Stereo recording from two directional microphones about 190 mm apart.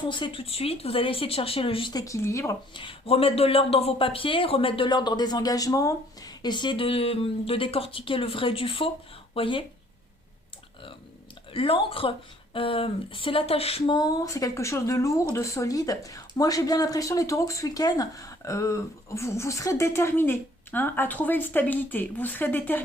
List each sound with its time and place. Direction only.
0.0 s speech: 25° left (ahead or behind)
11.5 s speech: 30° left (ahead or behind); by 22.8 s 10° left (ahead or behind)